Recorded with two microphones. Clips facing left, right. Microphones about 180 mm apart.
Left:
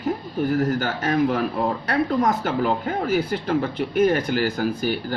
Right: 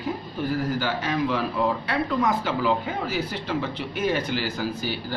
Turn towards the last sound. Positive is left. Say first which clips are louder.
# left 5 dB
turn(degrees=50)  # may be behind; listen again after turning